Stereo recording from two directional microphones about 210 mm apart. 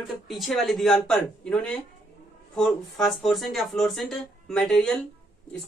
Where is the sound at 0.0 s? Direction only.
Centre (ahead or behind).